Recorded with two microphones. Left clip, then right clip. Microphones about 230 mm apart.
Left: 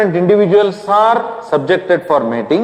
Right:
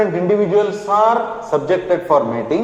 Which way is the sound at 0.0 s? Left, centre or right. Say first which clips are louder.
Left 4 dB; left.